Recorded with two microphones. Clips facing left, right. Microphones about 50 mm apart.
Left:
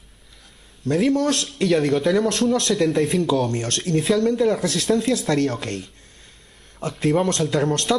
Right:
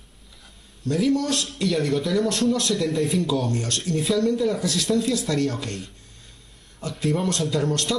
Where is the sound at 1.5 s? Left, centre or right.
Centre.